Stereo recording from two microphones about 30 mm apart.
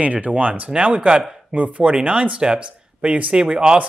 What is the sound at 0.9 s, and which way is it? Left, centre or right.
Speech, right.